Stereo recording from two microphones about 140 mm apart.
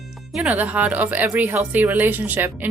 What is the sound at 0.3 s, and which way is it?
A woman's voice, 10° right (ahead or behind).